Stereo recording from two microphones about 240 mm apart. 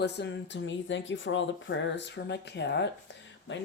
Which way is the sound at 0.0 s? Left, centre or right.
Left.